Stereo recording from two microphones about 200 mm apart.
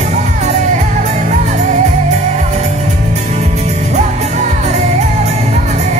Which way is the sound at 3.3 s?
35° right (ahead or behind).